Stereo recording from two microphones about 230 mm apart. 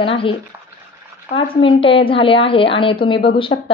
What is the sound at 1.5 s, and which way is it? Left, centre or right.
A woman's voice, left.